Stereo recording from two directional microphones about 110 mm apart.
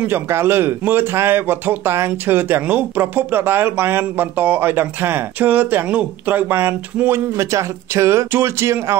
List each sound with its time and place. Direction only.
0.0 s speech: 20° right (ahead or behind)